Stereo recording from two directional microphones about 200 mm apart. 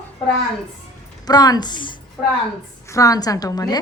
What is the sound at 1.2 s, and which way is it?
A woman's voice, 20° left (ahead or behind).